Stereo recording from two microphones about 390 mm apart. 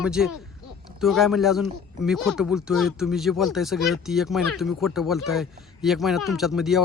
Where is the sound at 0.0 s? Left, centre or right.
Centre.